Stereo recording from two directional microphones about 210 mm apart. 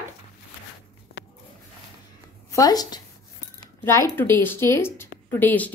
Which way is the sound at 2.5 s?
15° left (ahead or behind).